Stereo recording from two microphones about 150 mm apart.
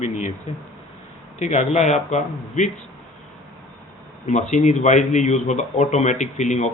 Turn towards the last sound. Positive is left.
turn(degrees=50)  # may be behind; listen again after turning